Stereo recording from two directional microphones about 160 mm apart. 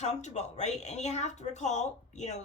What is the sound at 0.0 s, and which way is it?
A woman's voice, 45° left (ahead or behind).